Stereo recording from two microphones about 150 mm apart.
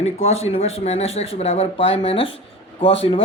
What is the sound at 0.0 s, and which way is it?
Speech, 45° left (ahead or behind).